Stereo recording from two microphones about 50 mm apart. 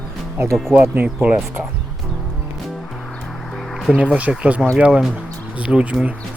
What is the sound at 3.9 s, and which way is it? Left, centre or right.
Speech, right.